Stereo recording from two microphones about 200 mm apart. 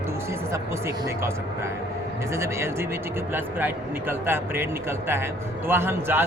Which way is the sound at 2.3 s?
15° right (ahead or behind).